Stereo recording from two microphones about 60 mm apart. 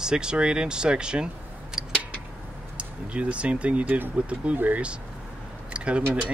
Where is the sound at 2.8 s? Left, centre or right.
Centre.